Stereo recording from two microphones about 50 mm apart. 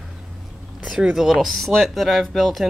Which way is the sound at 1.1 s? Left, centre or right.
Centre.